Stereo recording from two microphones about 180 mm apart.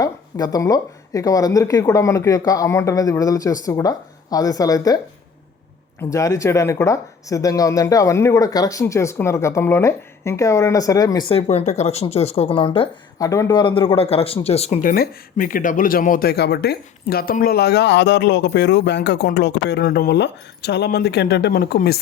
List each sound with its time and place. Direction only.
0.0 s speech: 20° left (ahead or behind)
6.0 s speech: 20° left (ahead or behind)
13.1 s speech: 20° left (ahead or behind); by 21.9 s 60° left (ahead or behind)